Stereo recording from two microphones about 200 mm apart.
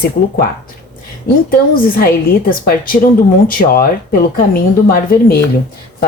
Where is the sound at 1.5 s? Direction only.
45° left (ahead or behind).